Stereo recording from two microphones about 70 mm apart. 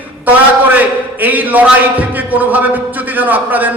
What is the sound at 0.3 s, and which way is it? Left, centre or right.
A man's voice, right.